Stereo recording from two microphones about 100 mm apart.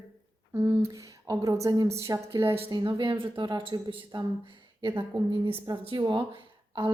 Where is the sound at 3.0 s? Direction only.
55° right (ahead or behind).